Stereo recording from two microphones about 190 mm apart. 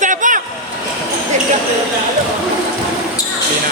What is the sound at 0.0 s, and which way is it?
Vehicle, 45° right (ahead or behind).